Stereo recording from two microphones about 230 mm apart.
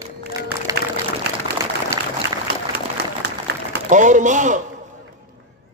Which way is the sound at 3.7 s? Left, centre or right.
Right.